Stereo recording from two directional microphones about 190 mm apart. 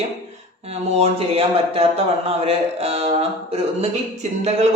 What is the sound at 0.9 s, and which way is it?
A man's voice, 30° right (ahead or behind).